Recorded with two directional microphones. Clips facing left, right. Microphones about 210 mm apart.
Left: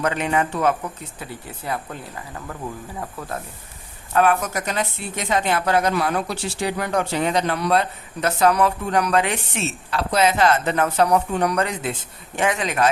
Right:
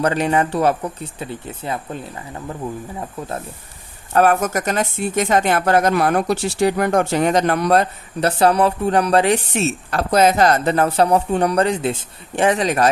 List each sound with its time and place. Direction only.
0.0 s speech: 35° right (ahead or behind)
1.2 s speech: 25° right (ahead or behind)
4.1 s a woman's voice: 40° right (ahead or behind)